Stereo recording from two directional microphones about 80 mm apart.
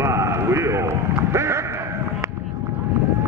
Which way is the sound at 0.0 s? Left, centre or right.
Right.